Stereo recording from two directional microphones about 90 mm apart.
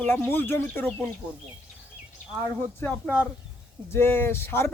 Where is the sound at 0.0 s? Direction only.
25° left (ahead or behind).